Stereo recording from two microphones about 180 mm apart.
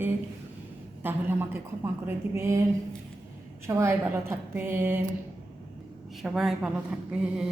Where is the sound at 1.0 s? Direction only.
10° right (ahead or behind).